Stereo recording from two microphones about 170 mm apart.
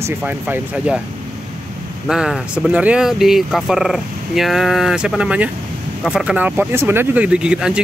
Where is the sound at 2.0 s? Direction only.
5° right (ahead or behind).